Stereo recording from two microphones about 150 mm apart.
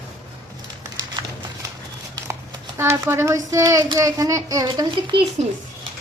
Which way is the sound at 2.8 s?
15° right (ahead or behind).